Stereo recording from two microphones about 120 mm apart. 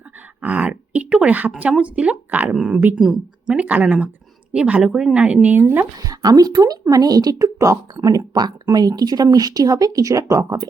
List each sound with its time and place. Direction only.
0.4 s speech: 10° right (ahead or behind)
6.1 s speech: 30° right (ahead or behind)